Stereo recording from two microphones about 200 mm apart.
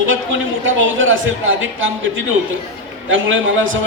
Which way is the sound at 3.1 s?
75° right (ahead or behind).